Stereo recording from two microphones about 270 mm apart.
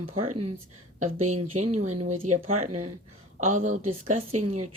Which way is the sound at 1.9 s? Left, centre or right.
Right.